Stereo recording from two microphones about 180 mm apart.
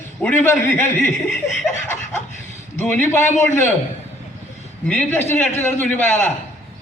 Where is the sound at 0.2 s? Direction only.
10° left (ahead or behind).